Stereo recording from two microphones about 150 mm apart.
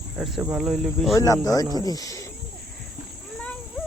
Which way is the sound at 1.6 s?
25° right (ahead or behind).